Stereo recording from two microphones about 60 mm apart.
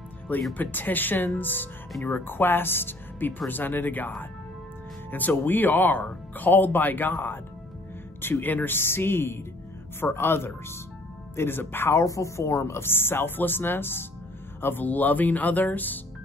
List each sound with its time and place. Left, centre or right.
0.6 s speech: left
11.9 s speech: left